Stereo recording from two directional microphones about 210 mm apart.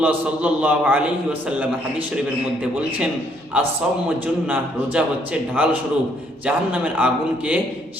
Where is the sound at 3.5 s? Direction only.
5° right (ahead or behind).